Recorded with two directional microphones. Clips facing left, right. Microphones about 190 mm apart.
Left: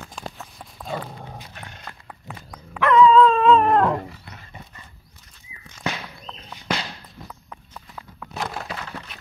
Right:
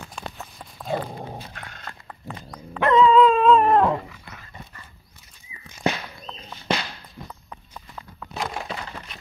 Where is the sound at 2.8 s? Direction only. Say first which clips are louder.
Left 1 dB; 30° right (ahead or behind).